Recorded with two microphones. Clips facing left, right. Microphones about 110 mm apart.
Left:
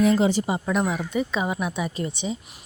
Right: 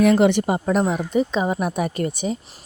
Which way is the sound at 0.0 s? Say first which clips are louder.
Right 4 dB; 65° right (ahead or behind).